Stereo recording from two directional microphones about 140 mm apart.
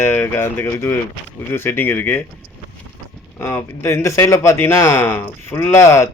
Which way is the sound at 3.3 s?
15° left (ahead or behind).